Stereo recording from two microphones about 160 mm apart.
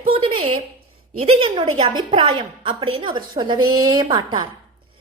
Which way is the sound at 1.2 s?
35° right (ahead or behind).